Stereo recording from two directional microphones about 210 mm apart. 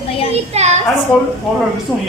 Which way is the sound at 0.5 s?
30° right (ahead or behind).